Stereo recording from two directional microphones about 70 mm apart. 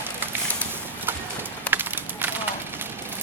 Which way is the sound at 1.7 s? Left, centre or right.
Right.